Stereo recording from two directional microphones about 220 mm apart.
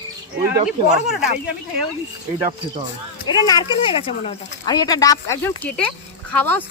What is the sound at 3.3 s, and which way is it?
Speech, 15° left (ahead or behind).